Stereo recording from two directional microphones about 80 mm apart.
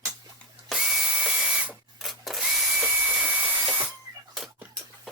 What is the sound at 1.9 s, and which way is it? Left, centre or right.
Drill, centre.